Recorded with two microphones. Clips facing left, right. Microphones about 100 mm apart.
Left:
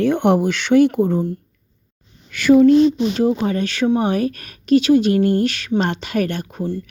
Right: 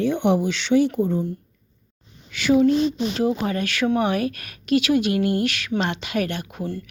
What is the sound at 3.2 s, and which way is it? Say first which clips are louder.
A woman's voice: left 4 dB; 30° left (ahead or behind).